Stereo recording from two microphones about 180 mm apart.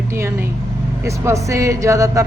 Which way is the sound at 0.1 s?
15° right (ahead or behind).